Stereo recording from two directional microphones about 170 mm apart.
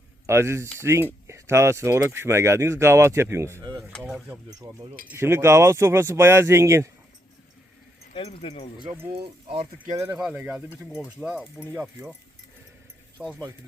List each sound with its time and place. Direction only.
0.3 s speech: 15° right (ahead or behind)
3.9 s speech: centre (ahead or behind)
4.4 s speech: 20° right (ahead or behind)
8.1 s speech: 35° left (ahead or behind)
9.9 s speech: 20° right (ahead or behind)
10.2 s speech: 10° right (ahead or behind)
11.7 s speech: 15° right (ahead or behind)
13.2 s speech: 10° right (ahead or behind)